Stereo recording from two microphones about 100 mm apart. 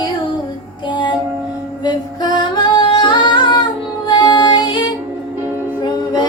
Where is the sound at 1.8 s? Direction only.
45° left (ahead or behind).